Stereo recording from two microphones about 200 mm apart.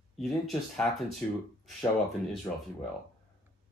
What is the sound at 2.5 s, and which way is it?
Speech, 10° left (ahead or behind).